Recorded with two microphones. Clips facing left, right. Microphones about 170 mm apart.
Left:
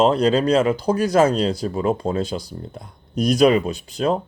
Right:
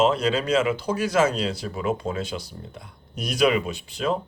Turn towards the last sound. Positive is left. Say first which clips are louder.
# left 4 dB
turn(degrees=40)  # may be behind; listen again after turning